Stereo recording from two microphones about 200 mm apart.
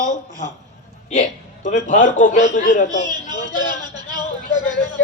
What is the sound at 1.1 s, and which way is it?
Speech, 40° left (ahead or behind).